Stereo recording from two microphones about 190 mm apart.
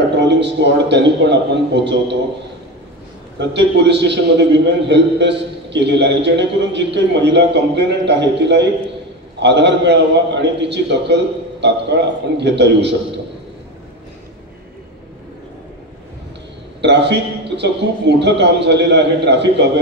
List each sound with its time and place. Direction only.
0.1 s a man's voice: 65° right (ahead or behind)
3.3 s a man's voice: 65° right (ahead or behind)
16.8 s a man's voice: 65° right (ahead or behind)